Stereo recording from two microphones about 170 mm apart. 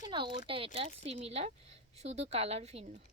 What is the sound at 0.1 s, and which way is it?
Speech, 30° right (ahead or behind).